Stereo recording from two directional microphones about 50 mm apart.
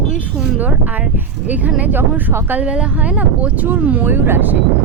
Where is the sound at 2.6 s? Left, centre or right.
Right.